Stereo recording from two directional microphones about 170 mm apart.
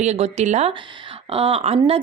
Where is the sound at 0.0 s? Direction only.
40° right (ahead or behind).